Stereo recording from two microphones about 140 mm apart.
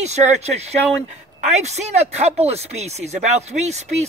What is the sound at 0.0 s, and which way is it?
Speech, 55° right (ahead or behind).